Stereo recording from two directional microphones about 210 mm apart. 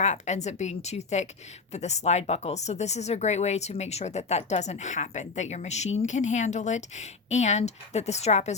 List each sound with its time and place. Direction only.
0.0 s speech: 35° left (ahead or behind)